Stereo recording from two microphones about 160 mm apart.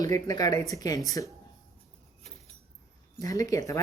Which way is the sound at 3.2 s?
20° left (ahead or behind).